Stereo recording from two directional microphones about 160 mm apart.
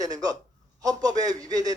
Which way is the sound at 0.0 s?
25° right (ahead or behind).